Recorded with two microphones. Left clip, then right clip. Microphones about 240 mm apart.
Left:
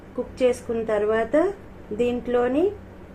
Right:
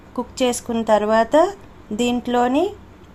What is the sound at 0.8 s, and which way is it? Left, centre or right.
Speech, right.